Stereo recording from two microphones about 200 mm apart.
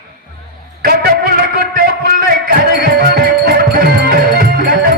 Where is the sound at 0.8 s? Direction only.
50° right (ahead or behind).